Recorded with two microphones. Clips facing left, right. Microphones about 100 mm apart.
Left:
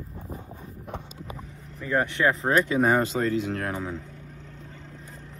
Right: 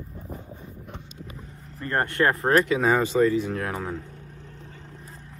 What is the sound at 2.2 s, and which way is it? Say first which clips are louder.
Speech: right 2 dB; 15° right (ahead or behind).